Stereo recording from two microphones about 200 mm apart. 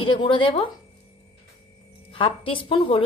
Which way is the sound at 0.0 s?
25° left (ahead or behind).